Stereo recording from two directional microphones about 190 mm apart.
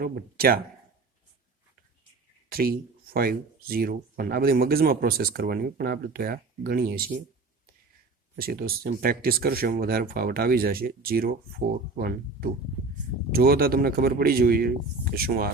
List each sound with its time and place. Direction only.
0.0 s speech: 50° right (ahead or behind)
2.5 s speech: 50° right (ahead or behind)
8.4 s speech: 50° right (ahead or behind)